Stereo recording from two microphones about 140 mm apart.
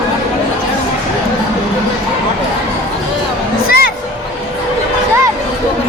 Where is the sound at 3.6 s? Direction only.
90° left.